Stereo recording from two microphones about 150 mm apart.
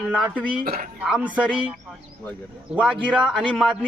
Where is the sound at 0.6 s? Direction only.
85° right.